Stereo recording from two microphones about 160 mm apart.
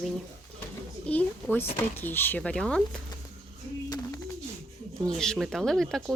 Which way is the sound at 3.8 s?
25° left (ahead or behind).